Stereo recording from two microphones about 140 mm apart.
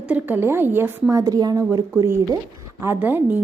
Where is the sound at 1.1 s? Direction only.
25° right (ahead or behind).